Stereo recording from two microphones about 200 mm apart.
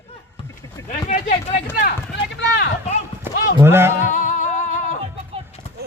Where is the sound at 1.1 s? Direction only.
35° left (ahead or behind).